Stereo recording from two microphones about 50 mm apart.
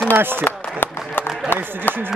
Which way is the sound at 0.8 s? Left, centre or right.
Left.